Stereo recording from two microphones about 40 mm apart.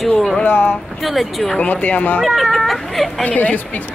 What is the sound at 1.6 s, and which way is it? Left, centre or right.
Speech, left.